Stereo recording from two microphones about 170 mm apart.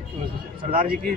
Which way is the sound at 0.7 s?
55° right (ahead or behind).